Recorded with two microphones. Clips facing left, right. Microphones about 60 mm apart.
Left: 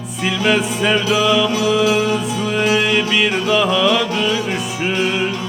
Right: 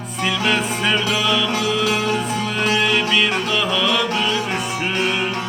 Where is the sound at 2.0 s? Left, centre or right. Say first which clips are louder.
Left 2 dB; right.